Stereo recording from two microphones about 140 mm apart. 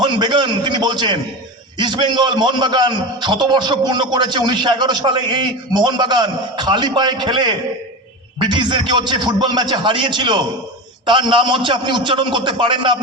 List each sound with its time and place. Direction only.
0.0 s a man's voice: 30° right (ahead or behind)